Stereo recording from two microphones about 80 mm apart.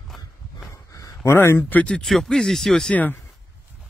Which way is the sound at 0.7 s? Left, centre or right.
Left.